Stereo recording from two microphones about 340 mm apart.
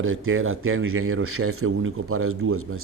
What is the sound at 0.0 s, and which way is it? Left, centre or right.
Speech, right.